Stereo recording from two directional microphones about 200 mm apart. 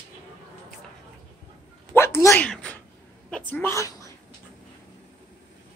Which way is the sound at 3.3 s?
5° left (ahead or behind).